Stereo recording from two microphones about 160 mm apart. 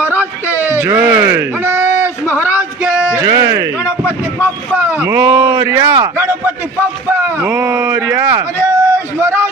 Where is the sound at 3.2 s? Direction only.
25° right (ahead or behind).